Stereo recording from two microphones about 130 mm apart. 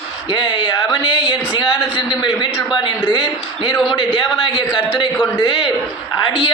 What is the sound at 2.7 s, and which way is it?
A man's voice, 35° left (ahead or behind).